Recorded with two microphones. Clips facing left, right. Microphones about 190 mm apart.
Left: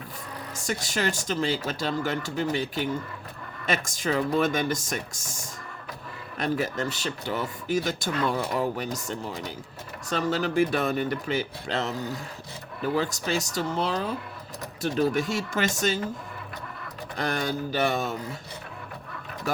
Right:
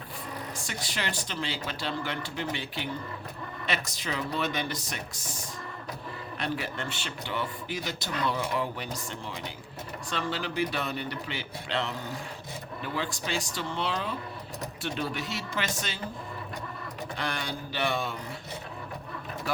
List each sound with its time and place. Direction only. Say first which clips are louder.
0.5 s speech: left 6 dB; 45° left (ahead or behind)
17.2 s speech: left 8 dB; 45° left (ahead or behind)